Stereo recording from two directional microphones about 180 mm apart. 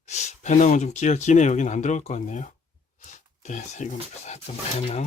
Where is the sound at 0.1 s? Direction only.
40° left (ahead or behind).